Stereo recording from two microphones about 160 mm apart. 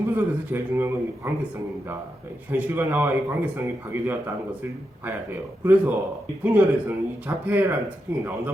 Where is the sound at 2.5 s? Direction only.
10° right (ahead or behind).